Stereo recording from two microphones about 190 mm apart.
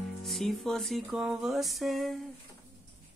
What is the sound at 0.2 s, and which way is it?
Speech, centre (ahead or behind).